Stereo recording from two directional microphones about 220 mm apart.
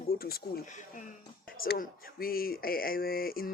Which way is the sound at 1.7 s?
40° left (ahead or behind).